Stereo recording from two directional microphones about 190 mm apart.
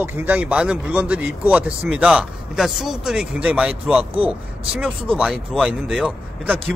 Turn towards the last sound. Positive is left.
turn(degrees=-5)  # may be behind; listen again after turning